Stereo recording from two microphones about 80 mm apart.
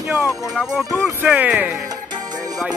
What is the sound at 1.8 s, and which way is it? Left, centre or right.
Music, right.